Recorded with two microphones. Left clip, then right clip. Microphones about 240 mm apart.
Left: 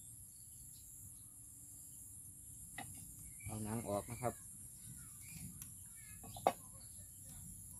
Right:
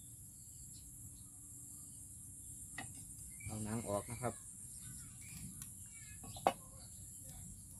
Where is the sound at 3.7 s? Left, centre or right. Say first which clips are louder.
Right 1 dB; centre.